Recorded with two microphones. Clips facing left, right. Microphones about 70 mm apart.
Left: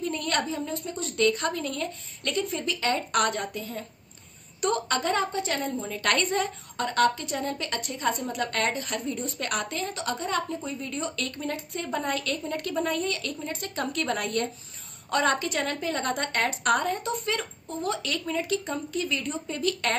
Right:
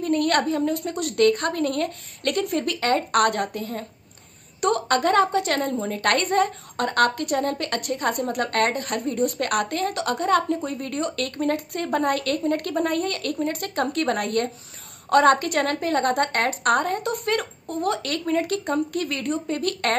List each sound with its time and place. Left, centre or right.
0.0 s a woman's voice: right
5.7 s a woman's voice: right